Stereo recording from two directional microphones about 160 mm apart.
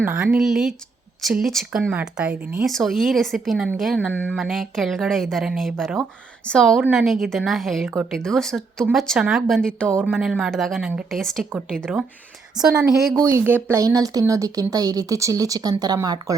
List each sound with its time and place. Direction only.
0.0 s a woman's voice: 10° right (ahead or behind)
4.1 s a sound: 10° left (ahead or behind)
4.4 s a woman's voice: centre (ahead or behind)
10.0 s a woman's voice: 10° right (ahead or behind)
12.7 s speech: 20° right (ahead or behind)
13.0 s a woman's voice: centre (ahead or behind)
13.2 s speech: 15° right (ahead or behind)